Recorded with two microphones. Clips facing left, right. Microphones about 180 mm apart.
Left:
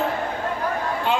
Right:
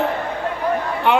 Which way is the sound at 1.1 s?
65° right (ahead or behind).